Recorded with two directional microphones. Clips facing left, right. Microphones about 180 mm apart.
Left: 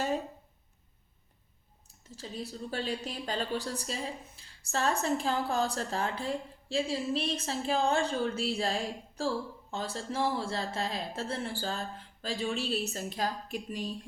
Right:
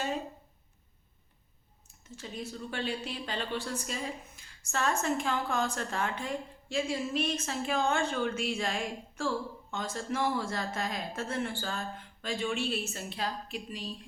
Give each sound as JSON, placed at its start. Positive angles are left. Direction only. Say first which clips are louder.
{"t": 1.9, "sound": "speech", "louder": "even", "side_deg": 35}